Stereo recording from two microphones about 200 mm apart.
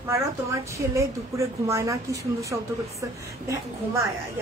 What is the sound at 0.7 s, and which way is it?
A woman's voice, 15° right (ahead or behind).